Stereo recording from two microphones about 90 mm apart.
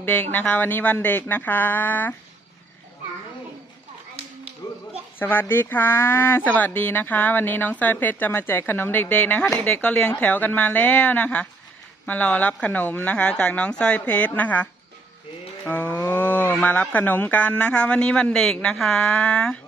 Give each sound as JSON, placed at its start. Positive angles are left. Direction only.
{"t": 0.0, "sound": "speech", "side_deg": 20}
{"t": 4.6, "sound": "a sound", "side_deg": 45}
{"t": 5.2, "sound": "speech", "side_deg": 20}